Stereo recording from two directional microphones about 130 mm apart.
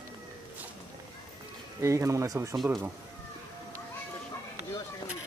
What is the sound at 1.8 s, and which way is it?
Speech, 25° right (ahead or behind).